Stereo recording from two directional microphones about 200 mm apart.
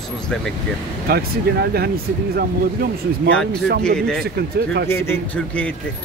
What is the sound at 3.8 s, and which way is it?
Speech, 5° left (ahead or behind).